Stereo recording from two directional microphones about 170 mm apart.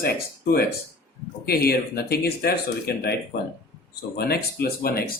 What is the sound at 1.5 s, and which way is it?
Speech, 65° left (ahead or behind).